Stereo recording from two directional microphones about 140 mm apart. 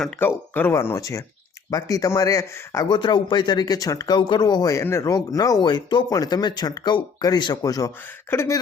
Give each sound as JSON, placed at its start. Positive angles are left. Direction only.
{"t": 0.2, "sound": "speech", "side_deg": 15}
{"t": 2.9, "sound": "speech", "side_deg": 35}